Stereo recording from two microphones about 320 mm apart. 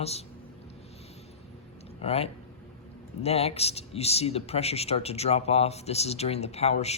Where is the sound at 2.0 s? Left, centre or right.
Centre.